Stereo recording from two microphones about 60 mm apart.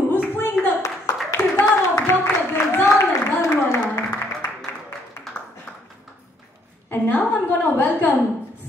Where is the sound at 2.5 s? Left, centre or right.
Left.